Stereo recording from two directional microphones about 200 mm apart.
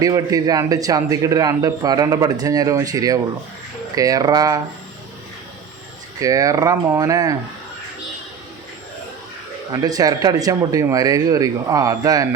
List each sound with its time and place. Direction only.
0.0 s a man's voice: 15° right (ahead or behind)
6.1 s a man's voice: 15° right (ahead or behind)
9.7 s a man's voice: 20° right (ahead or behind)